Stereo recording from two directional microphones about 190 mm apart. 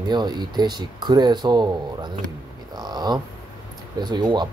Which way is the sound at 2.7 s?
20° right (ahead or behind).